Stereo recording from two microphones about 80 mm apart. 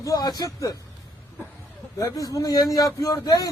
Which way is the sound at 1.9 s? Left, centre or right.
Left.